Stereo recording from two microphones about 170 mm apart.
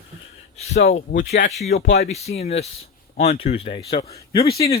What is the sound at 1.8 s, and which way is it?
Speech, 90° left.